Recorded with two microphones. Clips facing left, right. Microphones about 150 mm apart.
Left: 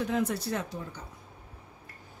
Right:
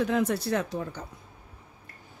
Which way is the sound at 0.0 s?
80° right.